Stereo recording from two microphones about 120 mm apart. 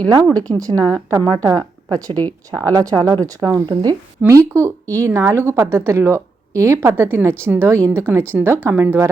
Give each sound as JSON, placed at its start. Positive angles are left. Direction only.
{"t": 0.5, "sound": "a woman's voice", "side_deg": -30}
{"t": 2.1, "sound": "speech", "side_deg": 15}
{"t": 3.0, "sound": "a woman's voice", "side_deg": -30}
{"t": 4.3, "sound": "a woman's voice", "side_deg": -25}